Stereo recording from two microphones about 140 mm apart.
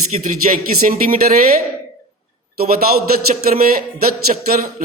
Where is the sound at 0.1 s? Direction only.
60° right (ahead or behind).